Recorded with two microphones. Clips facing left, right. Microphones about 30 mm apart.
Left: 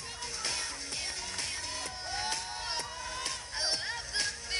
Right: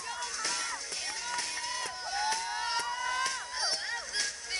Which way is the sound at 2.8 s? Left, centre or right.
Right.